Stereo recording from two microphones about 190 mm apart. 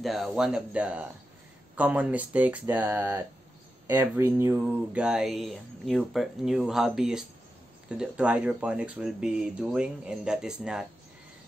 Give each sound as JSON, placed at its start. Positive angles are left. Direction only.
{"t": 0.0, "sound": "speech", "side_deg": 0}